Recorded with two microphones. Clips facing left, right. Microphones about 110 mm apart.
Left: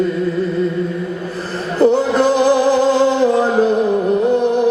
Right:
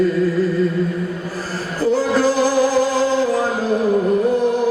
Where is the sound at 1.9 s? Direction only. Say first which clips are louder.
Left 3 dB; 25° left (ahead or behind).